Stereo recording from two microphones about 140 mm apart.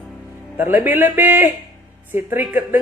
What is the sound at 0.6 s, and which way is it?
Speech, 15° right (ahead or behind).